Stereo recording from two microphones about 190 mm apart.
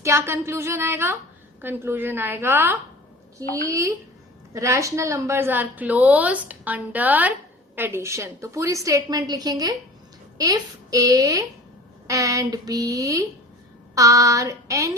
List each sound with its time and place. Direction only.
0.0 s a woman's voice: 15° right (ahead or behind)